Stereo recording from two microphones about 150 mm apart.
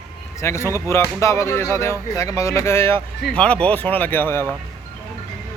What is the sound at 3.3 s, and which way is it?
Speech, 5° left (ahead or behind).